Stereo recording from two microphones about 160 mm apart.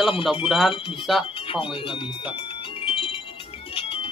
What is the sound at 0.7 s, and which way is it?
Speech, 30° left (ahead or behind).